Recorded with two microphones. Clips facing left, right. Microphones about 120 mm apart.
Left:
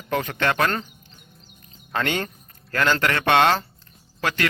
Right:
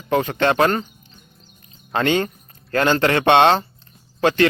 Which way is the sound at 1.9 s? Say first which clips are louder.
Right 6 dB; 25° right (ahead or behind).